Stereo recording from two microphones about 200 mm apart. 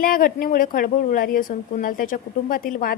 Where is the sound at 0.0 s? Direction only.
45° left (ahead or behind).